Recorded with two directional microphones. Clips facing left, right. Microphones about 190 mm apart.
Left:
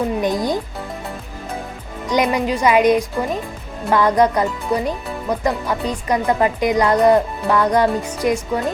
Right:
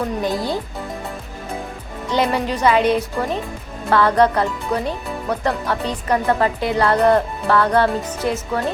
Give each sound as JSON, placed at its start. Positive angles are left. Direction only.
{"t": 0.2, "sound": "speech", "side_deg": 20}
{"t": 2.0, "sound": "speech", "side_deg": 15}